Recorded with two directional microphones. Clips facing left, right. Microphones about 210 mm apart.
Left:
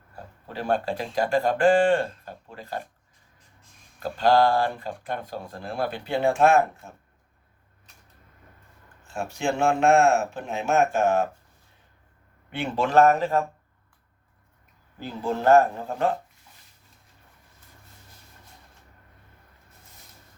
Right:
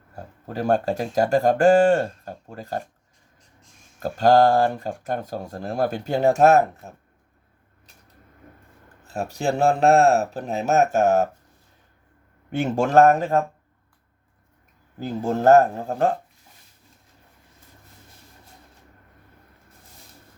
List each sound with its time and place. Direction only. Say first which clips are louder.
0.4 s speech: right 4 dB; 45° right (ahead or behind)
4.0 s speech: right 4 dB; 45° right (ahead or behind)
9.0 s speech: right 3 dB; 40° right (ahead or behind)
12.5 s speech: right 4 dB; 45° right (ahead or behind)
14.9 s speech: right 4 dB; 45° right (ahead or behind)